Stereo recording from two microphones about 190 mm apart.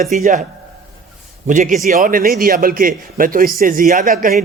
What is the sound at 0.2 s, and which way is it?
Speech, 45° right (ahead or behind).